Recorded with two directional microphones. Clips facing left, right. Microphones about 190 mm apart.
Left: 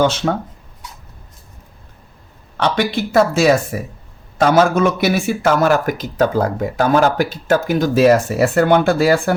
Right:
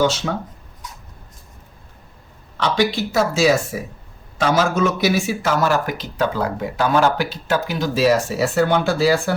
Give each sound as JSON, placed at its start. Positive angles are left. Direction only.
{"t": 2.6, "sound": "a man's voice", "side_deg": 55}